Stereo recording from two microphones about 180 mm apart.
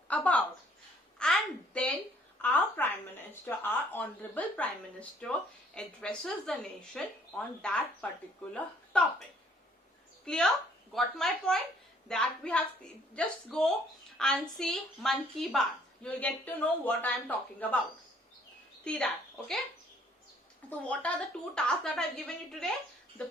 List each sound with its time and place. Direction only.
0.1 s a woman's voice: 5° left (ahead or behind)
1.2 s a sound: 5° left (ahead or behind)
2.4 s a woman's voice: 10° left (ahead or behind)
8.5 s a sound: 5° left (ahead or behind)
10.2 s a woman's voice: 5° left (ahead or behind)
18.9 s a woman's voice: 5° left (ahead or behind)
20.7 s a woman's voice: 10° left (ahead or behind)